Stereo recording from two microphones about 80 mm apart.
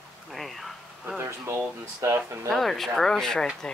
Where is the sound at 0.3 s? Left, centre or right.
Centre.